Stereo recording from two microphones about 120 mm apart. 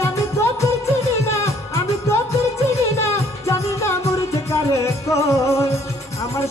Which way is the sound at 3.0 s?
20° left (ahead or behind).